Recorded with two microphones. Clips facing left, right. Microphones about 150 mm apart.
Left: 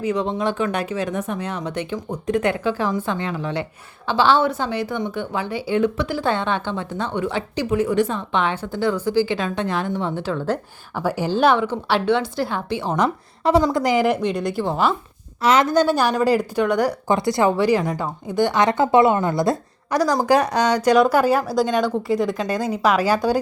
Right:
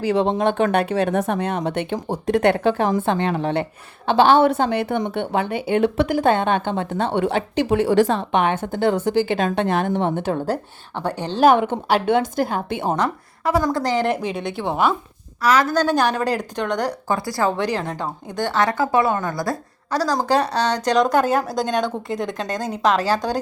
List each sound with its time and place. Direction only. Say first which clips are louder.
0.0 s a woman's voice: right 3 dB; 70° right (ahead or behind); by 10.6 s 40° right (ahead or behind)
11.0 s speech: left 2 dB; 5° left (ahead or behind)
11.4 s a woman's voice: right 5 dB; 55° right (ahead or behind)
13.0 s a woman's voice: left 2 dB; 25° left (ahead or behind)
13.7 s speech: left 2 dB; 10° left (ahead or behind)
14.1 s a woman's voice: left 2 dB; 5° right (ahead or behind)
15.4 s a woman's voice: left 1 dB; 25° left (ahead or behind)
15.7 s speech: left 1 dB; 10° left (ahead or behind)
17.2 s a woman's voice: left 4 dB; 20° left (ahead or behind)
17.6 s speech: left 4 dB; 5° left (ahead or behind)